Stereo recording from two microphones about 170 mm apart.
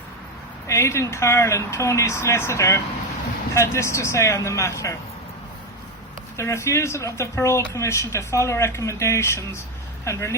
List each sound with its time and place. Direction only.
0.7 s speech: 15° left (ahead or behind)
6.3 s speech: 15° left (ahead or behind)